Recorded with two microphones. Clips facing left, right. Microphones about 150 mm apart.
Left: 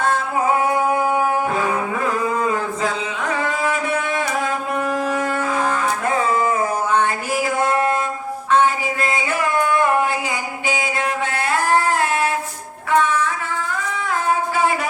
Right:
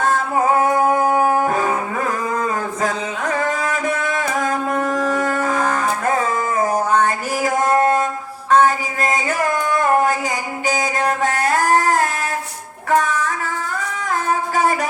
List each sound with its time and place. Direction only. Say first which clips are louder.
0.6 s music: right 2 dB; 40° right (ahead or behind)
3.7 s a sound: even; 40° right (ahead or behind)
10.7 s music: right 3 dB; 40° right (ahead or behind)